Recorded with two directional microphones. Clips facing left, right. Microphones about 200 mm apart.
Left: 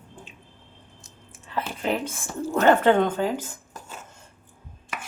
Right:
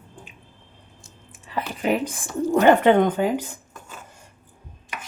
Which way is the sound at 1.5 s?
10° right (ahead or behind).